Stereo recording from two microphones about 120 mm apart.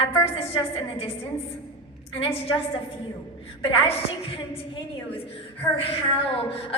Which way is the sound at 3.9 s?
50° left (ahead or behind).